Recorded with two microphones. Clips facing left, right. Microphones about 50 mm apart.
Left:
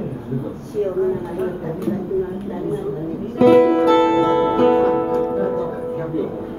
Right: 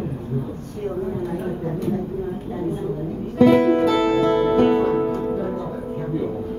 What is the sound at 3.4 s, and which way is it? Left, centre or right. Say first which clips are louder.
Music: left 3 dB; centre.